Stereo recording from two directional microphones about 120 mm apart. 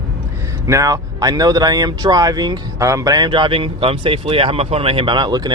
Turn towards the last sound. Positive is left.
turn(degrees=-35)  # may be behind; listen again after turning